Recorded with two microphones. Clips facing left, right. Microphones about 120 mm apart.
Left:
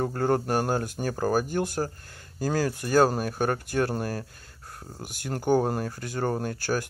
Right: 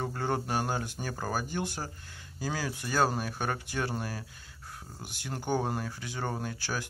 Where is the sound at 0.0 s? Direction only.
50° left (ahead or behind).